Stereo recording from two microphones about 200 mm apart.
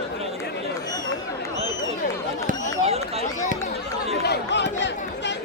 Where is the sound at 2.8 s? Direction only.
30° right (ahead or behind).